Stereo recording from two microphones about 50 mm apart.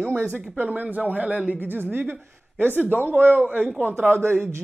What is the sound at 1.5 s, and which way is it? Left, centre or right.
Speech, right.